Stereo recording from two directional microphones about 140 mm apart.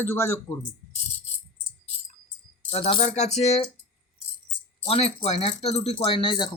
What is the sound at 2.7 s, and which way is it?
Speech, 50° left (ahead or behind).